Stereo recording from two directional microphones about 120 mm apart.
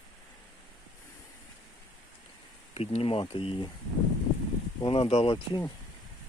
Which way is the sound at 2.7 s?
55° left (ahead or behind).